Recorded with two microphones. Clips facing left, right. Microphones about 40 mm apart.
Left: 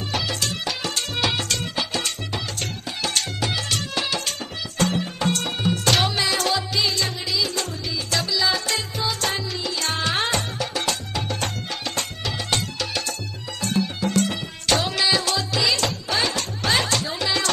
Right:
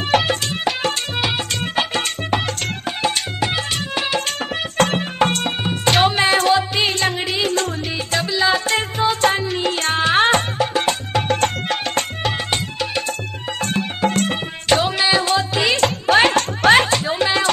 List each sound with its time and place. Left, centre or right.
0.1 s music: right
3.0 s music: right
4.7 s music: right
8.1 s music: right
11.2 s music: right
12.4 s music: right
13.6 s music: right
14.7 s music: right
16.9 s music: right